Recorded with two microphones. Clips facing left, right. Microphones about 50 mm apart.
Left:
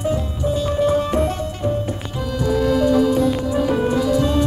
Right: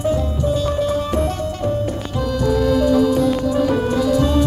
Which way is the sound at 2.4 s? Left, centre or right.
Left.